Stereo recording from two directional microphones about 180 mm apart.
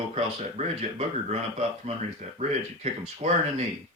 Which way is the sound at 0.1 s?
40° right (ahead or behind).